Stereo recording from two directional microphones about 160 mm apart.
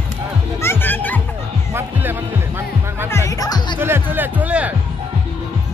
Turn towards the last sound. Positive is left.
turn(degrees=-10)  # may be behind; listen again after turning